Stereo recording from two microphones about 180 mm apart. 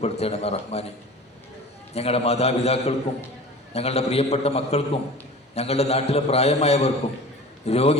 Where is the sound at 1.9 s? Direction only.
35° left (ahead or behind).